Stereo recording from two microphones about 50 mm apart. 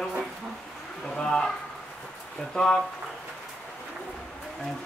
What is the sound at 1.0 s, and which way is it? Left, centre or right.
Speech, centre.